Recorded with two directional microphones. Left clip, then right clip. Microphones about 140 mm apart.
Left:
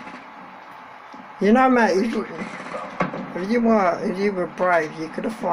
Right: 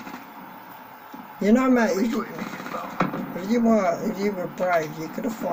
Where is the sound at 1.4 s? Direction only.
15° right (ahead or behind).